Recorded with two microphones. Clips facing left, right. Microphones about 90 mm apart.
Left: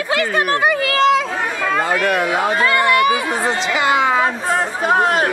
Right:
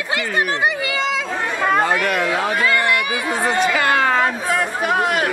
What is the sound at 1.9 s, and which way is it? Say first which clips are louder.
Speech: left 2 dB; 5° left (ahead or behind).